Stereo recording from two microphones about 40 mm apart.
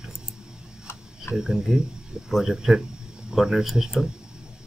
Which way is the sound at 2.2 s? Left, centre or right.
Centre.